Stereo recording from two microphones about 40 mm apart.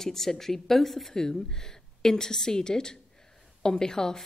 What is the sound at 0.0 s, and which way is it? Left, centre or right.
Speech, centre.